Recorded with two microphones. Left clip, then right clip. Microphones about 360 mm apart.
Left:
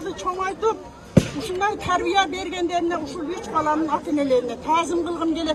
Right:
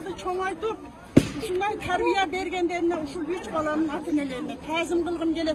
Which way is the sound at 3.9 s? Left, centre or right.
Centre.